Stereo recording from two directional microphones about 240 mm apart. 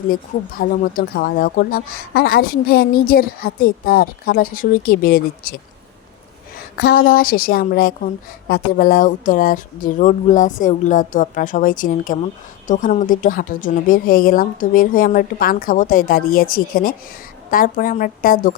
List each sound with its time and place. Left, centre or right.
0.1 s speech: left
6.7 s speech: left